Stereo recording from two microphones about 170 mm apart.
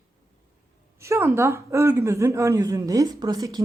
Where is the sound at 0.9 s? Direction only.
15° right (ahead or behind).